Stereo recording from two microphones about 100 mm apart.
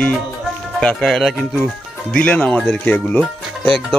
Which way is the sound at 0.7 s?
5° left (ahead or behind).